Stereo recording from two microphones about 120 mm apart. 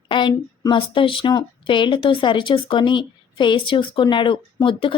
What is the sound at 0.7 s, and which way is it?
A woman's voice, 45° left (ahead or behind).